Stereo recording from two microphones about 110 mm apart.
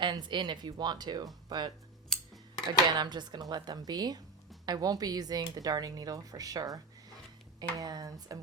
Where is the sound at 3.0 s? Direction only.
40° right (ahead or behind).